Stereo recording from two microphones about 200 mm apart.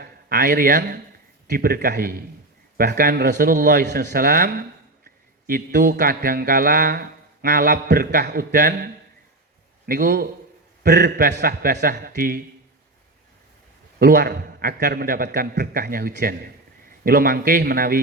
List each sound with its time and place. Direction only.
0.0 s speech: 45° right (ahead or behind)
1.5 s mantra: 50° right (ahead or behind)
9.8 s a man's voice: 50° right (ahead or behind)
10.8 s mantra: 50° right (ahead or behind)
14.0 s mantra: 50° right (ahead or behind)